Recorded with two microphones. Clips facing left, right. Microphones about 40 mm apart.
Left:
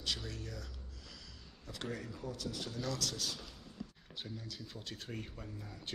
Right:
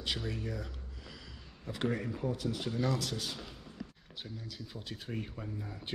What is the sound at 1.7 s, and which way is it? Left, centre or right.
Speech, right.